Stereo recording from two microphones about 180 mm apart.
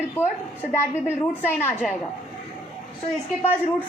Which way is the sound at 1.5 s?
10° left (ahead or behind).